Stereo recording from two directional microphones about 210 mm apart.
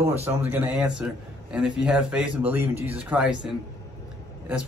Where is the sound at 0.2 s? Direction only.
10° right (ahead or behind).